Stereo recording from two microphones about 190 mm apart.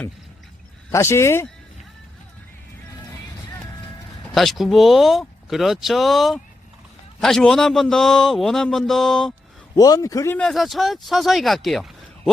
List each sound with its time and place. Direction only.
0.9 s speech: 15° left (ahead or behind)
4.4 s a man's voice: centre (ahead or behind)
9.7 s speech: 20° left (ahead or behind)
10.3 s a man's voice: centre (ahead or behind)